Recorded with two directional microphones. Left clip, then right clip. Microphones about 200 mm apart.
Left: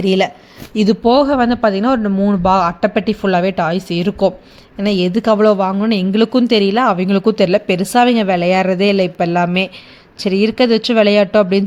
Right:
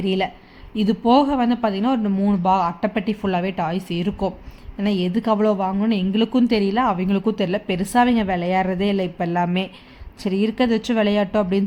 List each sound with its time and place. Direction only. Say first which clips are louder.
0.0 s a woman's voice: left 8 dB; 15° left (ahead or behind)